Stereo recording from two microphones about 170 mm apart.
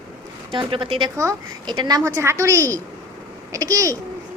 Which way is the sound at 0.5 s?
30° right (ahead or behind).